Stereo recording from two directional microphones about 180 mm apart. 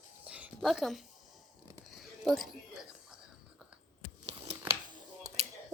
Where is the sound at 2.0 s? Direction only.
Centre (ahead or behind).